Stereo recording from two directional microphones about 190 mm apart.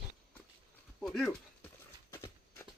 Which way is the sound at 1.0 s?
Centre (ahead or behind).